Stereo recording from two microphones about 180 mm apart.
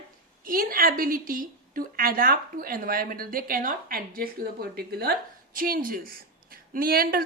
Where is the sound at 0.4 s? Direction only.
50° right (ahead or behind).